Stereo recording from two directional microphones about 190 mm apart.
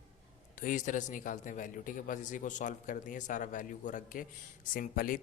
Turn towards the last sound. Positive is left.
turn(degrees=45)  # may be behind; listen again after turning